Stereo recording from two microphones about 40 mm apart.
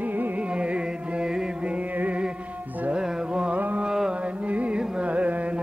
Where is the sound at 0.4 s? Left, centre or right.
Right.